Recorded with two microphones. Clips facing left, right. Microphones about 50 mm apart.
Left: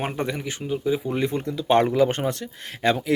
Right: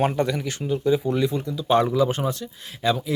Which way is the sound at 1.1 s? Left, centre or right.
Left.